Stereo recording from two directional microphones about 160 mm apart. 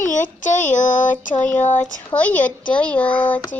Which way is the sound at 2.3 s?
55° left (ahead or behind).